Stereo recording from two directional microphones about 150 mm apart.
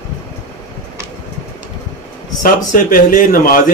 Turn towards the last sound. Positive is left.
turn(degrees=70)  # may be behind; listen again after turning